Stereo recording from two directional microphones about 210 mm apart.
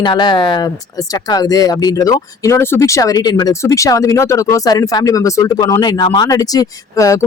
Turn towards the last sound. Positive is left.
turn(degrees=15)  # may be behind; listen again after turning